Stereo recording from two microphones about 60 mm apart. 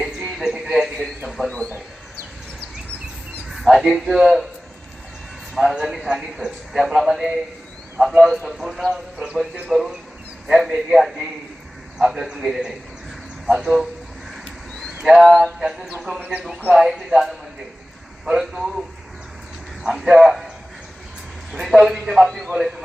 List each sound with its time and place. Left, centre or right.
0.0 s music: centre
1.2 s a sound: centre
3.5 s a man's voice: centre
5.5 s a man's voice: centre
15.0 s a man's voice: centre
19.8 s a man's voice: centre
21.5 s a man's voice: centre